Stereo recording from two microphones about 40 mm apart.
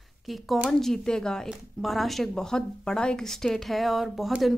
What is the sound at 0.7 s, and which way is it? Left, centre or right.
Speech, centre.